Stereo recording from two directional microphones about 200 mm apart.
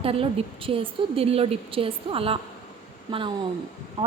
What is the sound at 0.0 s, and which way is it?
A woman's voice, 30° right (ahead or behind).